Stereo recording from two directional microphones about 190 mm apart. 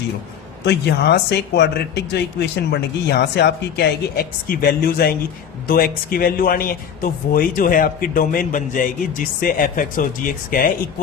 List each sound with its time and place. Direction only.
0.6 s speech: 65° left (ahead or behind); by 10.7 s 45° left (ahead or behind)